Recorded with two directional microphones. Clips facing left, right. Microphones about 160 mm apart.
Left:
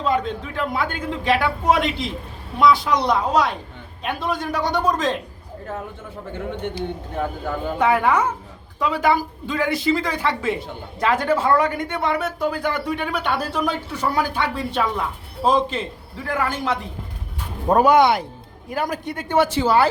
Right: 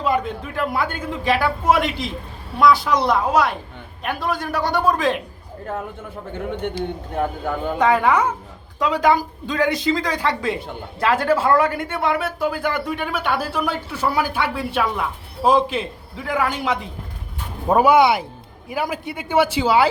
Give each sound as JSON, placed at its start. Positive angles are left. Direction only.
{"t": 0.0, "sound": "a man's voice", "side_deg": -10}
{"t": 6.7, "sound": "speech", "side_deg": -45}
{"t": 7.8, "sound": "a woman's voice", "side_deg": 10}
{"t": 8.0, "sound": "speech", "side_deg": -10}
{"t": 9.5, "sound": "speech", "side_deg": -20}